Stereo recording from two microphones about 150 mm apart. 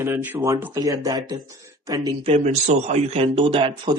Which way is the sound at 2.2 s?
50° right (ahead or behind).